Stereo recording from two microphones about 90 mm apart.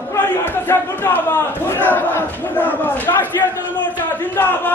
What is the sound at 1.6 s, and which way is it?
Battle cry, 25° left (ahead or behind).